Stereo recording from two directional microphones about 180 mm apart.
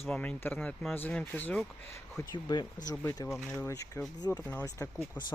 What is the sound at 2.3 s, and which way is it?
Speech, 25° left (ahead or behind).